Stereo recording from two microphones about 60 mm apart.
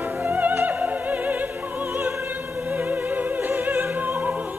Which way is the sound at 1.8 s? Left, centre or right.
Right.